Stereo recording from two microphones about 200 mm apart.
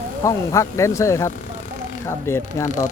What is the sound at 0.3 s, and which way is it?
Speech, 15° left (ahead or behind).